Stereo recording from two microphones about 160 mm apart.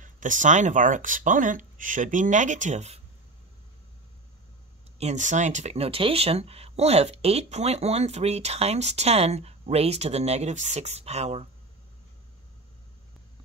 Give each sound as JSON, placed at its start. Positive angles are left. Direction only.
{"t": 0.0, "sound": "speech", "side_deg": -50}
{"t": 4.9, "sound": "speech", "side_deg": -45}